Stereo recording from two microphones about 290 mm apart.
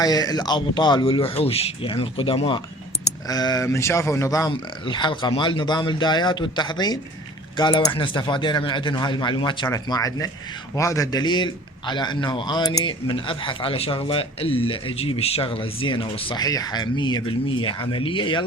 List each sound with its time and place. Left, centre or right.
0.0 s a man's voice: centre